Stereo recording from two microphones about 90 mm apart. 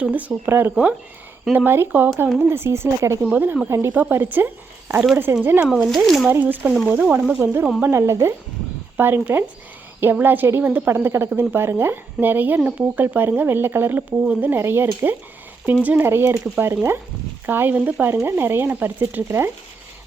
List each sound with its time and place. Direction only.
0.0 s speech: 15° right (ahead or behind)
5.6 s speech: 5° right (ahead or behind)
6.2 s speech: 20° right (ahead or behind)
7.3 s speech: 25° right (ahead or behind)